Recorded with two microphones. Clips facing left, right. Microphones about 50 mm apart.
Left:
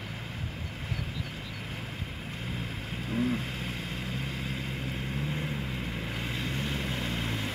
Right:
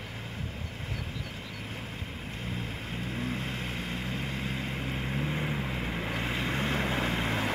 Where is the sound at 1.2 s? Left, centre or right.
Centre; by 6.6 s right.